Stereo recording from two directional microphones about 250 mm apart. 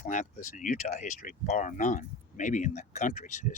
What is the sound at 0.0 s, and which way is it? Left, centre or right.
Speech, left.